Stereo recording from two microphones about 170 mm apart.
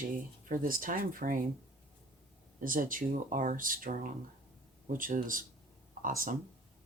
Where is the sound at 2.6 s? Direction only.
55° right (ahead or behind).